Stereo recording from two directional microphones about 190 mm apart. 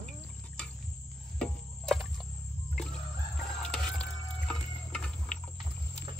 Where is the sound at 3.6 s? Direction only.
5° left (ahead or behind).